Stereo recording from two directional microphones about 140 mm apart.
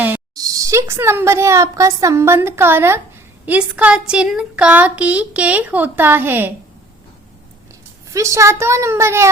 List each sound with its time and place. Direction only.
0.3 s a woman's voice: 25° right (ahead or behind)
8.1 s a woman's voice: 20° right (ahead or behind)